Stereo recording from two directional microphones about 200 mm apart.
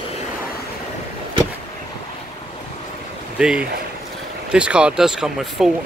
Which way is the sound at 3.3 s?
5° right (ahead or behind).